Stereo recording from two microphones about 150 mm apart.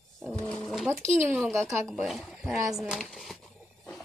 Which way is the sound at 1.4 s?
Centre (ahead or behind).